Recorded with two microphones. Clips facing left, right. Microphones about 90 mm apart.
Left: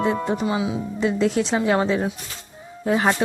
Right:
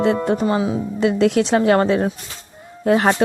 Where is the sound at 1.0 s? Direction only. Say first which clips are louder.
Right 4 dB; 65° right (ahead or behind).